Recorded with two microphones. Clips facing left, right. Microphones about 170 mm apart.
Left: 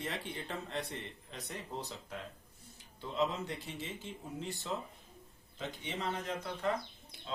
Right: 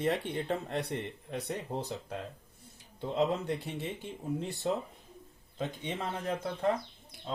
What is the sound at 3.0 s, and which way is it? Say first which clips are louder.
Speech: right 5 dB; 60° right (ahead or behind).